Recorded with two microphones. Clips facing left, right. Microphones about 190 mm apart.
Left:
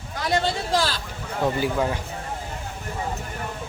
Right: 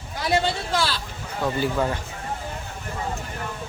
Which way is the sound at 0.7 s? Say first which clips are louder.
Left 1 dB; 40° left (ahead or behind).